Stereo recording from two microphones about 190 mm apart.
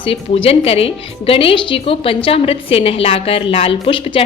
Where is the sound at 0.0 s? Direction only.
30° left (ahead or behind).